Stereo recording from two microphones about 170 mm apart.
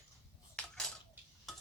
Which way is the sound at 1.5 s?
Centre (ahead or behind).